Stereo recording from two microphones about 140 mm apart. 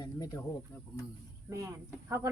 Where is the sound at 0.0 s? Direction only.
25° left (ahead or behind).